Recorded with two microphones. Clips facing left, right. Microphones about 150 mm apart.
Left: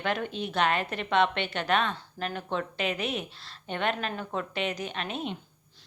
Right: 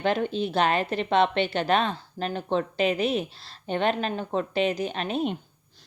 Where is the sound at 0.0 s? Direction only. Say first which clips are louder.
Right 6 dB; 30° right (ahead or behind).